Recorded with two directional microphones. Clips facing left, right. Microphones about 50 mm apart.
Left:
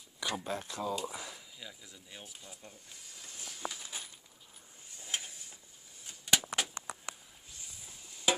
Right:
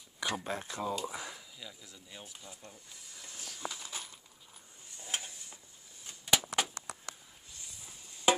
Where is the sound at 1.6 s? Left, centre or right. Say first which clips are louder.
Even; centre.